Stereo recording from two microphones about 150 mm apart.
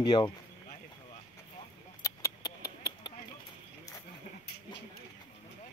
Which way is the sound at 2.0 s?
20° left (ahead or behind).